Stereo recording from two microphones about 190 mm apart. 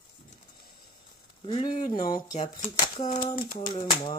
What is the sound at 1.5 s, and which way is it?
Speech, 30° left (ahead or behind).